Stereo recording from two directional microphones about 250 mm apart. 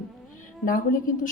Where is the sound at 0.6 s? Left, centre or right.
Left.